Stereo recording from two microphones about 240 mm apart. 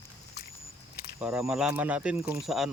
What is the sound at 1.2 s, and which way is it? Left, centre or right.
Speech, centre.